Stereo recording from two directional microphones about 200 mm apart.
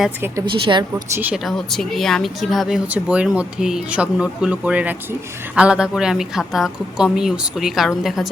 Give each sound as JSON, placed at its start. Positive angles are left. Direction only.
{"t": 0.0, "sound": "a woman's voice", "side_deg": -10}
{"t": 0.5, "sound": "a woman's voice", "side_deg": -25}
{"t": 1.2, "sound": "speech", "side_deg": -5}